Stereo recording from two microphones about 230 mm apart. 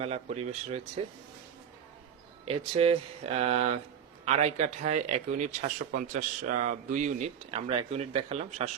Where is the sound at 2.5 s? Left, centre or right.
Right.